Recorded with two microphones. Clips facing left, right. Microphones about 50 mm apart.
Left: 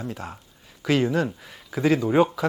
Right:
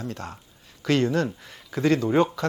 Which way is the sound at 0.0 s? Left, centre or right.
Centre.